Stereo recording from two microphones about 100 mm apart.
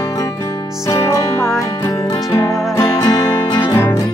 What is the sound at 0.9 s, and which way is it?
Music, 30° left (ahead or behind).